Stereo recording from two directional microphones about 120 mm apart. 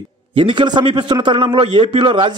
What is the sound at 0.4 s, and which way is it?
A man's voice, 45° right (ahead or behind).